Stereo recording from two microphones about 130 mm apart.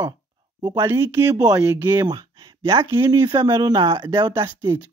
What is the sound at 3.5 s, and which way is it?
Speech, 35° right (ahead or behind).